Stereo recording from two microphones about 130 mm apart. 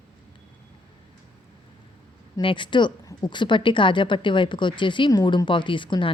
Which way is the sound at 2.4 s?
40° left (ahead or behind).